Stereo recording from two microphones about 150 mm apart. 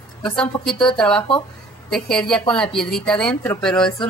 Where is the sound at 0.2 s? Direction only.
5° left (ahead or behind).